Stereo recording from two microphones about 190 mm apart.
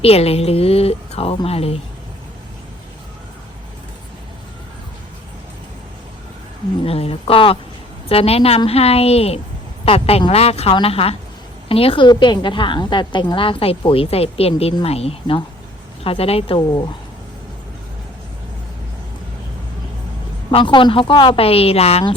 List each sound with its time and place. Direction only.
0.0 s a woman's voice: 30° left (ahead or behind)
6.8 s a woman's voice: 30° left (ahead or behind)
20.5 s a woman's voice: 25° left (ahead or behind)